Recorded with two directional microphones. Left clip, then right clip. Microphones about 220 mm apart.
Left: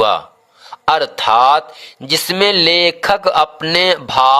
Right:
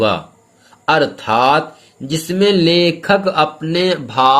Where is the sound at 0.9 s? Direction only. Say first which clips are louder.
Left 1 dB; 45° left (ahead or behind).